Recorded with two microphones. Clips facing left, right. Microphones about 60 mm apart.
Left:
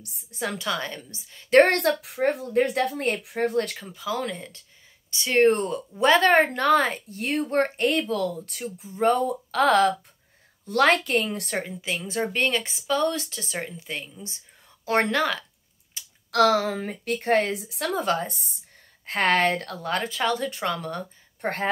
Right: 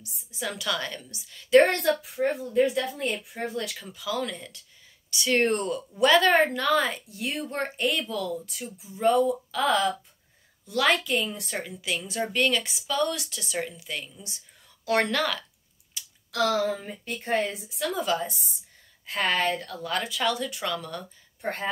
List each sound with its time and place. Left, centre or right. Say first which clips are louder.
0.0 s a woman's voice: left 3 dB; left
1.5 s a woman's voice: left 2 dB; left
3.7 s a woman's voice: left 2 dB; left
11.5 s a woman's voice: left 1 dB; left
16.0 s a sound: right 1 dB; left
16.3 s a woman's voice: left 5 dB; left
17.8 s a woman's voice: left 2 dB; left
19.0 s a woman's voice: left 4 dB; left
19.9 s speech: left 2 dB; left